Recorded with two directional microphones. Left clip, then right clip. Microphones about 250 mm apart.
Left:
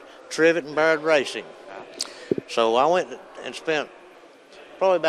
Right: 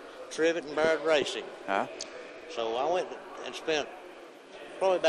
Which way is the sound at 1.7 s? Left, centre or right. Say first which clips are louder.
Right 13 dB; right.